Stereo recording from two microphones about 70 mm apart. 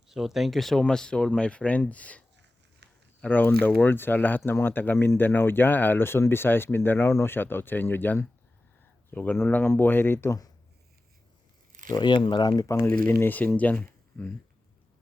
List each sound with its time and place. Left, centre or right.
0.1 s speech: centre; by 10.3 s left
11.9 s speech: left
12.6 s speech: left
13.2 s speech: left